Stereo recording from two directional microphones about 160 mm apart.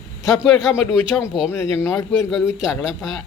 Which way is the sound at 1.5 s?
15° left (ahead or behind).